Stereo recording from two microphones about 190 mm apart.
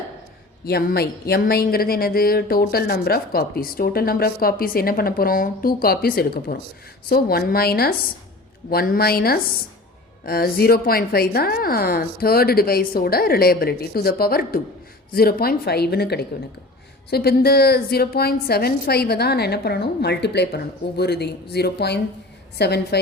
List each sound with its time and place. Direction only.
0.6 s a woman's voice: 50° left (ahead or behind)